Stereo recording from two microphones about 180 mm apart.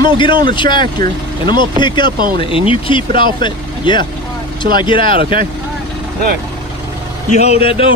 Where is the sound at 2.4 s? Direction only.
30° left (ahead or behind).